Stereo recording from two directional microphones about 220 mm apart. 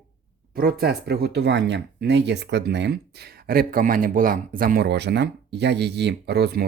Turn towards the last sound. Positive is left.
turn(degrees=-50)  # may be behind; listen again after turning